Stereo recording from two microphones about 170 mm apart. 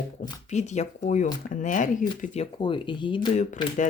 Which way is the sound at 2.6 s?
30° left (ahead or behind).